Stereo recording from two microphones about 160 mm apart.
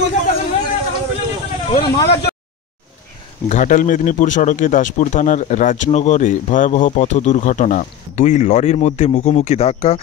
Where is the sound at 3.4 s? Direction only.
50° left (ahead or behind).